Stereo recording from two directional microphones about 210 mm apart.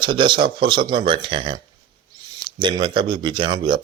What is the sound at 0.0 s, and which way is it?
A man's voice, 25° right (ahead or behind).